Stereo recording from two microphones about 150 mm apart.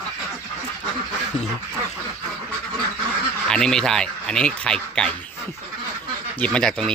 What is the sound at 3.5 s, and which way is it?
Speech, 5° left (ahead or behind).